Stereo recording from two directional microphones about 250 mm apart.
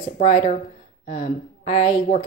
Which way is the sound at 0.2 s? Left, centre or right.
Left.